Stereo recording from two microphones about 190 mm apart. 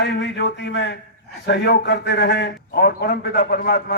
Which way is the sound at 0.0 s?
65° left (ahead or behind).